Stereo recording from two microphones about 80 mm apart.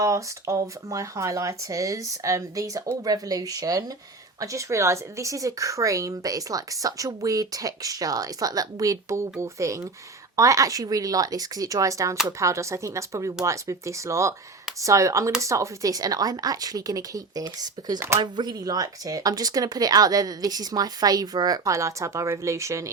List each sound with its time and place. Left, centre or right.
0.0 s a woman's voice: right
4.4 s a woman's voice: right